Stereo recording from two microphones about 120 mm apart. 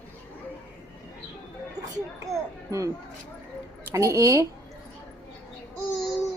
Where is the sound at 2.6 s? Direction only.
25° right (ahead or behind).